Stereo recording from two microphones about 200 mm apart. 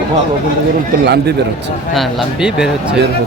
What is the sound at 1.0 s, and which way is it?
Speech, 55° right (ahead or behind).